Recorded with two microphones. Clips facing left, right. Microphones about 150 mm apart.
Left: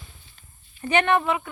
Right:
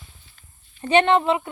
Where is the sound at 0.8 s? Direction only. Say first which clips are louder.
Right 4 dB; 25° right (ahead or behind).